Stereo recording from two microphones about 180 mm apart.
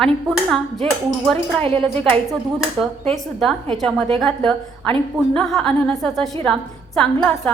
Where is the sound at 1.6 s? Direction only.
30° right (ahead or behind).